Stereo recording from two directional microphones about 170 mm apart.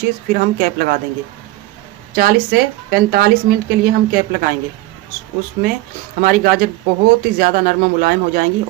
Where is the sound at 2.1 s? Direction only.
70° right (ahead or behind).